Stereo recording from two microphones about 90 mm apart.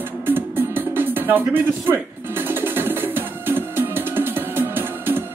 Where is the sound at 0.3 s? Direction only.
25° right (ahead or behind).